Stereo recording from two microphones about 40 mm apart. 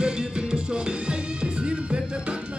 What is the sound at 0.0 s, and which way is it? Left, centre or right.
Music, centre.